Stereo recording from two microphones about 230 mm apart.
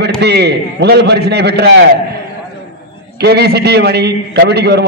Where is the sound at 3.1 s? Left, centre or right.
Right.